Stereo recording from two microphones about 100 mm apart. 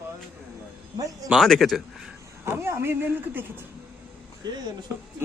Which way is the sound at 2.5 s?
25° right (ahead or behind).